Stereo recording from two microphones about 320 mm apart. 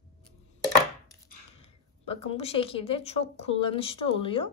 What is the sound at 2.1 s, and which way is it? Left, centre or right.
Speech, centre.